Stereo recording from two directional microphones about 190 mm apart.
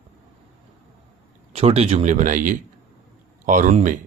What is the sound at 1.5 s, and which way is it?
Speech, 30° right (ahead or behind).